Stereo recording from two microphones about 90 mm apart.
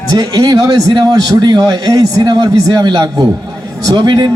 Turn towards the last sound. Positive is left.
turn(degrees=-55)  # may be behind; listen again after turning